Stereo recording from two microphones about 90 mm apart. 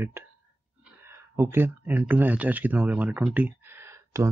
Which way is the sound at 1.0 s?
30° right (ahead or behind).